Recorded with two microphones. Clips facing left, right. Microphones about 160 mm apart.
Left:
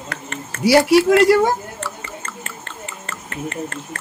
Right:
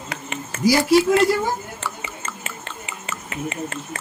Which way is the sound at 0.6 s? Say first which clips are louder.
Left 3 dB; 70° left (ahead or behind).